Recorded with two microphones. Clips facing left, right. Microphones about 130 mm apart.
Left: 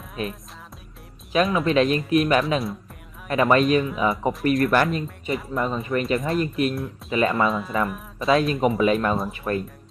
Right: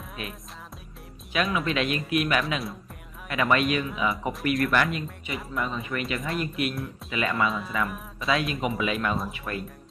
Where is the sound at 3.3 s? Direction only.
35° left (ahead or behind).